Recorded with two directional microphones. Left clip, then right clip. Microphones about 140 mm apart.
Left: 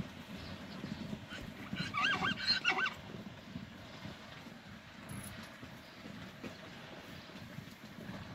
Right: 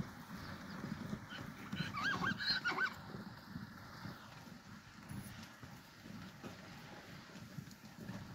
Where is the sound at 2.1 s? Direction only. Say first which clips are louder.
Left 4 dB; 75° right (ahead or behind).